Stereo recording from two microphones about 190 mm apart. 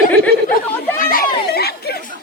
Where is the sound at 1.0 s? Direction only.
50° left (ahead or behind).